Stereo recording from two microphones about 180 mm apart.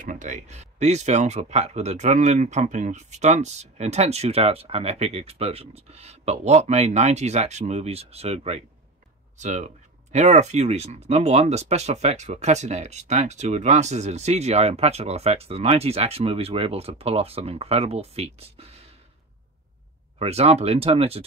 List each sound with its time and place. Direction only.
0.0 s speech: 45° right (ahead or behind)
20.2 s speech: 35° right (ahead or behind)